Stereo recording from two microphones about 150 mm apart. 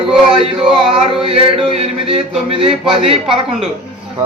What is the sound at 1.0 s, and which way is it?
Speech, 35° right (ahead or behind).